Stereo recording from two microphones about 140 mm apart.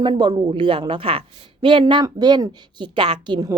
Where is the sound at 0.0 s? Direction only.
30° right (ahead or behind).